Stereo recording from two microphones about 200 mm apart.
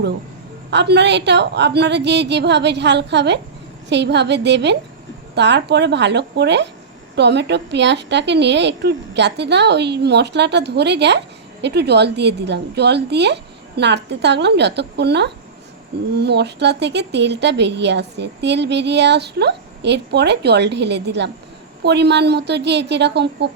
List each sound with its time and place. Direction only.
0.7 s a woman's voice: 60° right (ahead or behind)